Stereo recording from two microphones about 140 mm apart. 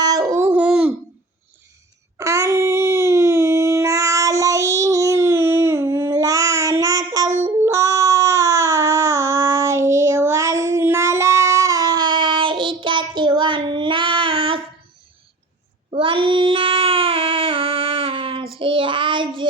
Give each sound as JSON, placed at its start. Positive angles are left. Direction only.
{"t": 0.0, "sound": "dog", "side_deg": -25}
{"t": 0.4, "sound": "dog", "side_deg": -10}
{"t": 2.1, "sound": "child singing", "side_deg": -20}
{"t": 7.6, "sound": "a sound", "side_deg": -20}
{"t": 15.9, "sound": "child singing", "side_deg": -40}